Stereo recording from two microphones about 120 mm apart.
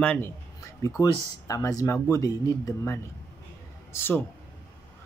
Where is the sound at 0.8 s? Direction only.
30° left (ahead or behind).